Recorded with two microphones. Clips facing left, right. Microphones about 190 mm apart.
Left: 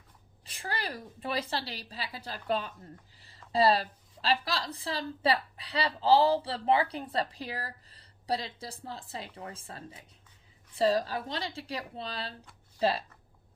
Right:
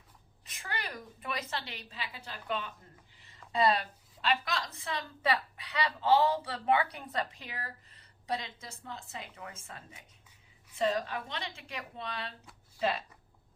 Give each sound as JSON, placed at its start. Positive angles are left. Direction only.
{"t": 0.4, "sound": "a woman's voice", "side_deg": 35}
{"t": 3.2, "sound": "a sound", "side_deg": 35}
{"t": 3.5, "sound": "a woman's voice", "side_deg": 30}